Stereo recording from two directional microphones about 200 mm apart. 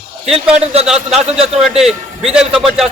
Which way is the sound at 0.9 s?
Centre (ahead or behind).